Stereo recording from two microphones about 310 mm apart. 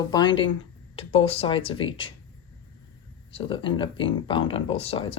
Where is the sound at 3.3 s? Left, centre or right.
Centre.